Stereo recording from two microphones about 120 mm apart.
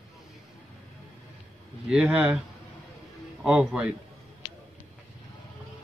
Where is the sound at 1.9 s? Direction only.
10° right (ahead or behind).